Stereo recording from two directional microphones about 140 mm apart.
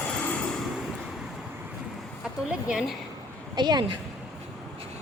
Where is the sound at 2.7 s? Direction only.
5° right (ahead or behind).